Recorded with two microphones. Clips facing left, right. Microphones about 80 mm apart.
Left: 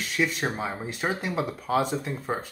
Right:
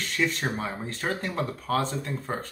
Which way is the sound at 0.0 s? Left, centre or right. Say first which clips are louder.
Left 1 dB; centre.